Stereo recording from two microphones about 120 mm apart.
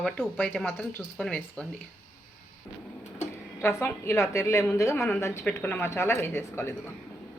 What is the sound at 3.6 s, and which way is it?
A woman's voice, 20° left (ahead or behind).